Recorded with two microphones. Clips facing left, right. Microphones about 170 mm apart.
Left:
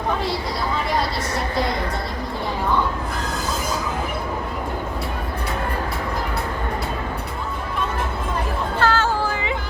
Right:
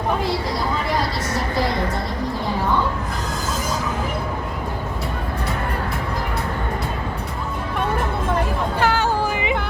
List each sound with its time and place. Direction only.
8.8 s music: 15° right (ahead or behind)